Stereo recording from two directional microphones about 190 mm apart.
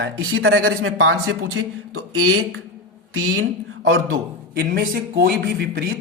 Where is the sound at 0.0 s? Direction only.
90° right.